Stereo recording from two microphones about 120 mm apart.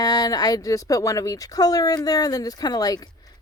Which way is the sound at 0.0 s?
35° left (ahead or behind).